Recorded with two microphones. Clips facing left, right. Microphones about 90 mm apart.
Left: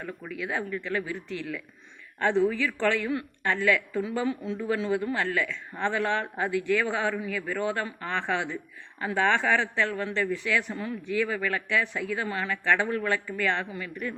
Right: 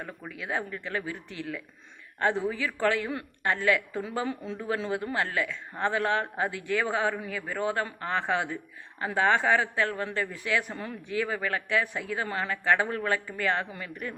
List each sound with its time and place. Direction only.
0.0 s speech: 30° right (ahead or behind)
4.3 s speech: 40° right (ahead or behind)
4.9 s speech: 20° right (ahead or behind)